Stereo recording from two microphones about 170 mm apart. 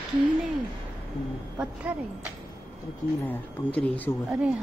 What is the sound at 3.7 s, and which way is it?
Speech, 10° left (ahead or behind).